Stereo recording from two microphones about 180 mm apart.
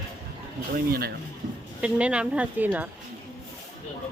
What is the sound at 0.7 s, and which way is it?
Speech, 55° right (ahead or behind).